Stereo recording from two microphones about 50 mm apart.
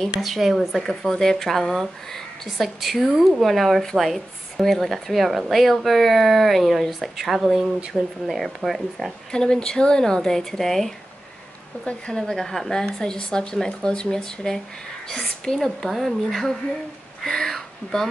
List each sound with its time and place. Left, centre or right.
0.2 s speech: centre
11.8 s speech: centre
12.2 s speech: centre